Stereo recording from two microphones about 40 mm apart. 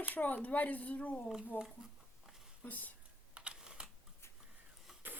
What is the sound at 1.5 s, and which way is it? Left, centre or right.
Speech, left.